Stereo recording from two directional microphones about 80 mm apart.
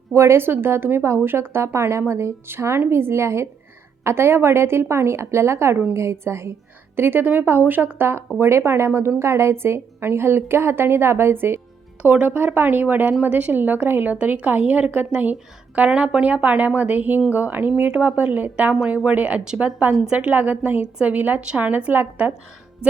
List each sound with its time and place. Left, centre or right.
0.1 s a woman's voice: right
12.0 s a woman's voice: centre